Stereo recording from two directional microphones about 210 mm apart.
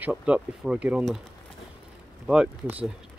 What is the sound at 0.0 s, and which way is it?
Speech, 5° right (ahead or behind).